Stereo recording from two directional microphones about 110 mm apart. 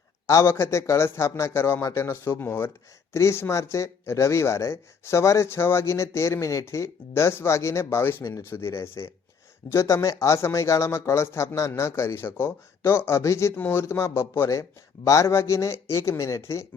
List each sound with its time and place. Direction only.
0.3 s speech: 25° left (ahead or behind)